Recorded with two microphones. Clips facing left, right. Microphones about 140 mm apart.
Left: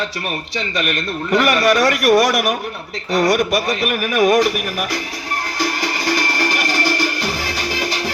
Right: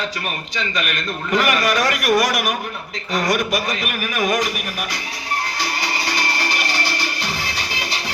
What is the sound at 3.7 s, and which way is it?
Speech, 45° left (ahead or behind).